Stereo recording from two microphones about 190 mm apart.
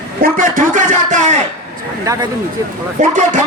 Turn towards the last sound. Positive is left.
turn(degrees=-40)  # may be behind; listen again after turning